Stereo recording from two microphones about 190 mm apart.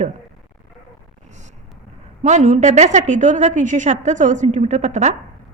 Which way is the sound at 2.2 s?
40° right (ahead or behind).